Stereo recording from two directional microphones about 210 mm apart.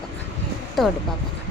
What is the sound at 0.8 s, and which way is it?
Speech, centre (ahead or behind).